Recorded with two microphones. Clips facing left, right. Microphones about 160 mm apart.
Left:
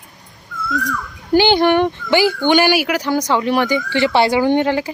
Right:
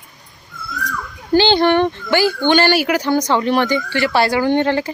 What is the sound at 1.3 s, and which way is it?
Speech, 15° left (ahead or behind).